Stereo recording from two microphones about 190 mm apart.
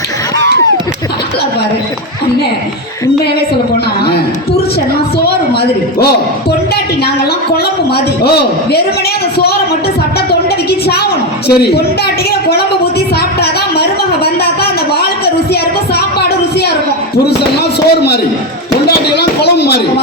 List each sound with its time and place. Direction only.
7.5 s a man's voice: 55° left (ahead or behind)
10.7 s a woman's voice: 55° left (ahead or behind)
12.3 s a woman's voice: 55° left (ahead or behind)
17.2 s a sound: 60° left (ahead or behind)